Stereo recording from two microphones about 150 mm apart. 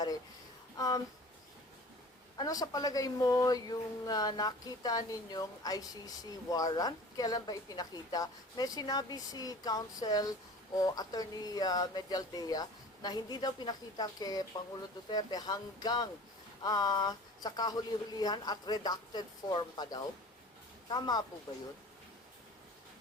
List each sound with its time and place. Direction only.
0.8 s speech: 25° left (ahead or behind)
2.4 s speech: 25° left (ahead or behind)